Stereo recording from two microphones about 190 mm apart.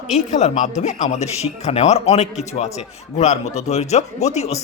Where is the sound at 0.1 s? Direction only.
40° left (ahead or behind).